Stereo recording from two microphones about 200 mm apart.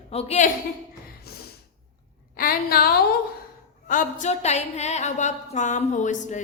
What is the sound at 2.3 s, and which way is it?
Speech, 45° left (ahead or behind).